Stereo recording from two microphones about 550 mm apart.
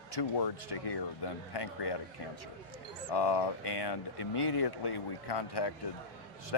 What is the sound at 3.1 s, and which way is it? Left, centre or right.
Speech, left.